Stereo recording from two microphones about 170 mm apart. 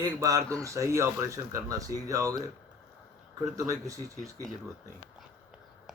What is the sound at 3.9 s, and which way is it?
Speech, 20° right (ahead or behind).